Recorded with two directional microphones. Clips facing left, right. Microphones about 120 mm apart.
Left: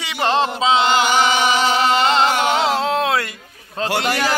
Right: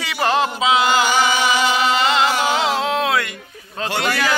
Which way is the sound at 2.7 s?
30° left (ahead or behind).